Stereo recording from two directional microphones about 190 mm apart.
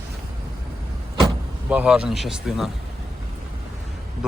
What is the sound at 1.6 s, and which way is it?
Speech, 5° right (ahead or behind).